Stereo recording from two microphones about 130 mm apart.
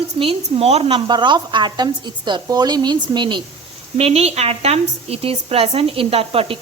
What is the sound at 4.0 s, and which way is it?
Speech, 50° right (ahead or behind).